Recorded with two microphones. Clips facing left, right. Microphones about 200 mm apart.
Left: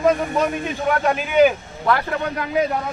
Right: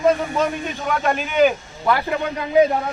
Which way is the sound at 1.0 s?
10° left (ahead or behind).